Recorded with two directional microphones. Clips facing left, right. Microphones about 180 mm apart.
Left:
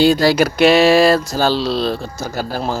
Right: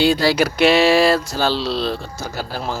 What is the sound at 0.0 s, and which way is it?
Speech, 45° left (ahead or behind).